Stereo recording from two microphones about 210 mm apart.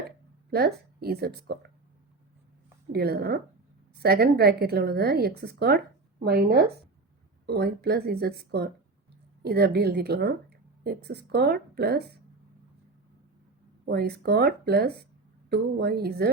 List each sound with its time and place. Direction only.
0.5 s a woman's voice: 45° right (ahead or behind)
2.9 s a woman's voice: 50° right (ahead or behind)
13.8 s a woman's voice: 50° right (ahead or behind)